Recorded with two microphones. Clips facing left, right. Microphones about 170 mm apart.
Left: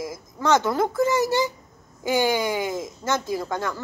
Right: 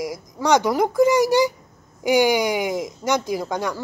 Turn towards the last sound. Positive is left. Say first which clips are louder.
# right 2 dB
turn(degrees=-15)  # may be behind; listen again after turning